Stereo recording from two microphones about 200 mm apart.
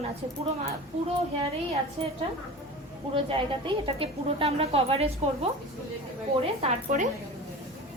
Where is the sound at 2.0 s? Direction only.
30° right (ahead or behind).